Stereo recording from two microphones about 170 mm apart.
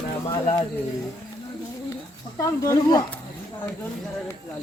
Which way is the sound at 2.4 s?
20° left (ahead or behind).